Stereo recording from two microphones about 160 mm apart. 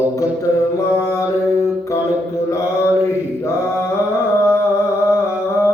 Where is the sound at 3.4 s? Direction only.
15° left (ahead or behind).